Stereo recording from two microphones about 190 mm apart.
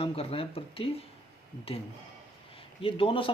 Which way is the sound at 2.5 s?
30° left (ahead or behind).